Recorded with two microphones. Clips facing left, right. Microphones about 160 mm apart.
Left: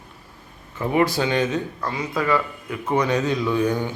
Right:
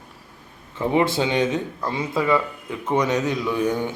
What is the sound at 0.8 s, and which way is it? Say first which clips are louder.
Speech: even; 20° right (ahead or behind).